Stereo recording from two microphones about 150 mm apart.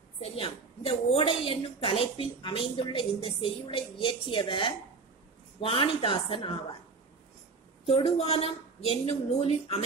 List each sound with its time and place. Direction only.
0.2 s a woman's voice: 40° left (ahead or behind)
7.8 s a woman's voice: 40° left (ahead or behind)